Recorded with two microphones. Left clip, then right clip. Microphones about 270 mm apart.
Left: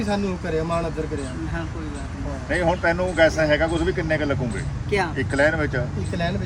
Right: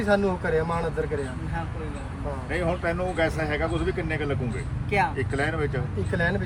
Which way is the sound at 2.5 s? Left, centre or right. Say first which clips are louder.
Left 7 dB; left.